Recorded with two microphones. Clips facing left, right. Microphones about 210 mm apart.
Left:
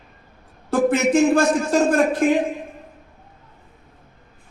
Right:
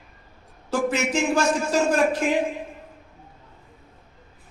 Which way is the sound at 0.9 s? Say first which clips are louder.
Left 9 dB; 55° left (ahead or behind).